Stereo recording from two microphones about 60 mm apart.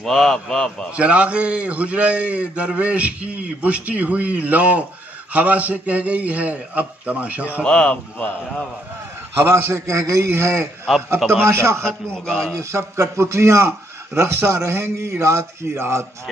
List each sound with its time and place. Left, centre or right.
0.0 s a man's voice: centre
0.9 s a man's voice: right
7.6 s a man's voice: centre
9.4 s a man's voice: right
9.9 s a man's voice: right
11.8 s a man's voice: centre
12.5 s a man's voice: right